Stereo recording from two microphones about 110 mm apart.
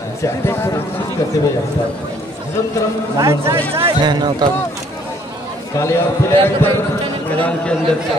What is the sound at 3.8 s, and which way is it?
Speech, 40° right (ahead or behind).